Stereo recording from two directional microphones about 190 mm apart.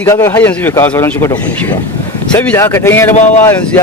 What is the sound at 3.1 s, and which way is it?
Speech, 40° left (ahead or behind).